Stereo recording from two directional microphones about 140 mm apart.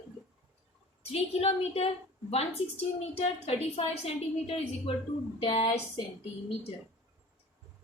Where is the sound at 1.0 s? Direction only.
45° left (ahead or behind).